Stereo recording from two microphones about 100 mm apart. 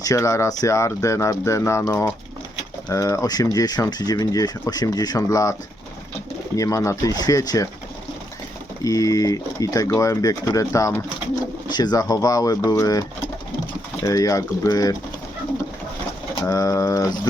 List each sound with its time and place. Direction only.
0.0 s speech: 35° left (ahead or behind)
6.6 s speech: 30° left (ahead or behind)
8.8 s speech: 35° left (ahead or behind)
11.7 s speech: 45° left (ahead or behind)
16.4 s speech: 35° left (ahead or behind)